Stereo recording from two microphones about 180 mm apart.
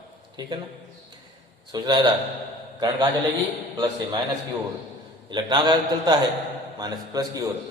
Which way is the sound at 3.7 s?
20° right (ahead or behind).